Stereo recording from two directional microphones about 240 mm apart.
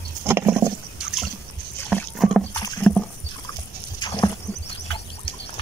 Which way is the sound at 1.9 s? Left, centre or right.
Centre.